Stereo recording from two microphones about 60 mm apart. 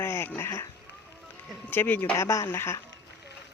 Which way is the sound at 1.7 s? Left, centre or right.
Left.